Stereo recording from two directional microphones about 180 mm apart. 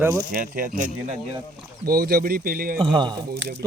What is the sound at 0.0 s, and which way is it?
Speech, 15° right (ahead or behind).